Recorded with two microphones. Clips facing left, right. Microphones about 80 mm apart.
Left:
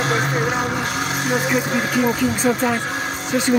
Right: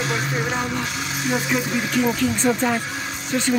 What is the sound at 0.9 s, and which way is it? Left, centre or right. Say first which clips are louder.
Speech: left 3 dB; left.